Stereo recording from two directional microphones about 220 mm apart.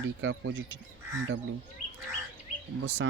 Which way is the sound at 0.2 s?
60° right (ahead or behind).